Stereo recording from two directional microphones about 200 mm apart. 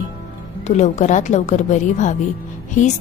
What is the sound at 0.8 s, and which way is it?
A woman's voice, 35° left (ahead or behind).